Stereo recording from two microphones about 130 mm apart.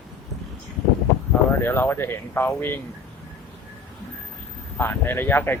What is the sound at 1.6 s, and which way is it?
Speech, 15° left (ahead or behind).